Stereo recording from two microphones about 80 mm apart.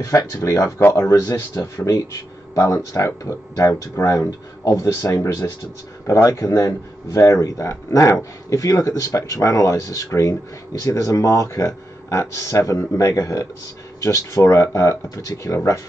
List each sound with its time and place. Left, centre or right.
0.0 s speech: left